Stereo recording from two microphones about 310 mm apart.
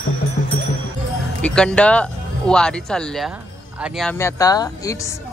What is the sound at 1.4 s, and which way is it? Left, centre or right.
Speech, centre.